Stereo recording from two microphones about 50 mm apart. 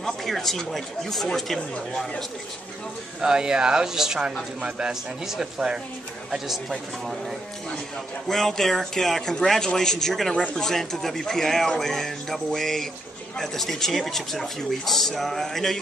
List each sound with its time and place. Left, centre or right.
0.0 s speech: centre
3.2 s speech: centre
8.3 s speech: centre
10.3 s speech: left
10.6 s speech: centre